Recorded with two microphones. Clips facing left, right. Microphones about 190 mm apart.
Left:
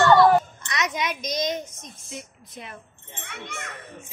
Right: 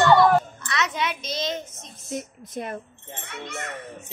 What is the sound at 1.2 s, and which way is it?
Speech, 15° left (ahead or behind).